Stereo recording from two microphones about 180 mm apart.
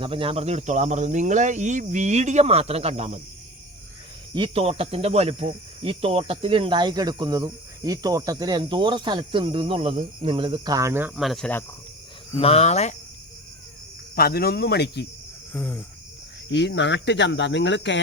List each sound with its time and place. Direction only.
0.0 s speech: 30° right (ahead or behind)
4.4 s speech: 30° right (ahead or behind); by 11.1 s 15° right (ahead or behind)
11.2 s speech: centre (ahead or behind)
12.4 s speech: 35° left (ahead or behind)
14.2 s speech: 60° left (ahead or behind)
15.5 s cricket: 10° left (ahead or behind)
16.5 s speech: 80° left